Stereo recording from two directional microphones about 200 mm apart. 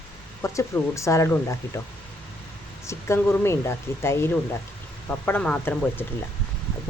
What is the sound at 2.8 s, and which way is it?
Speech, 15° left (ahead or behind).